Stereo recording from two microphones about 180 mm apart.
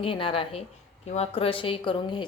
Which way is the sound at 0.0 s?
30° left (ahead or behind).